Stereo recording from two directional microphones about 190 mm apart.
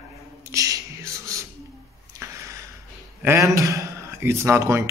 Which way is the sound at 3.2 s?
15° right (ahead or behind).